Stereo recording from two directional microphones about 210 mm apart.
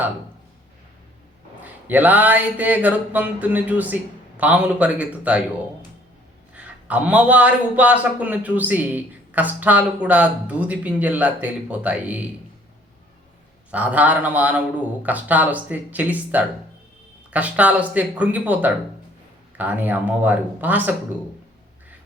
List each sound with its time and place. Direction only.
1.6 s a man's voice: 5° right (ahead or behind)
6.5 s a man's voice: 5° right (ahead or behind)
13.7 s a man's voice: 5° right (ahead or behind)